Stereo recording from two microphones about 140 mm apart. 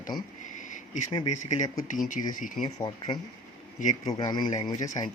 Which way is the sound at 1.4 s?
60° left (ahead or behind).